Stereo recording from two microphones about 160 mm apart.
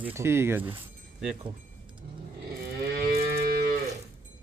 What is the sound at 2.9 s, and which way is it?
Moo, 70° right (ahead or behind).